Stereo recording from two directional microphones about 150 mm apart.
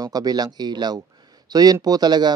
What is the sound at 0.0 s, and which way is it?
Speech, 25° right (ahead or behind).